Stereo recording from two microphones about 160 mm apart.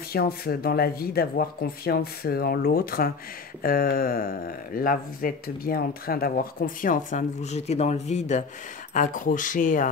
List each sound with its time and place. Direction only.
0.1 s speech: 70° left (ahead or behind); by 9.8 s 55° left (ahead or behind)